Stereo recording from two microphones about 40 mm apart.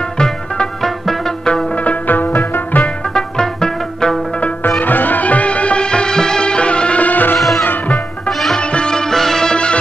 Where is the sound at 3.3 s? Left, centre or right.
Centre.